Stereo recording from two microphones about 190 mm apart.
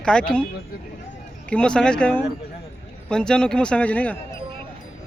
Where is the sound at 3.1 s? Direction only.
5° left (ahead or behind).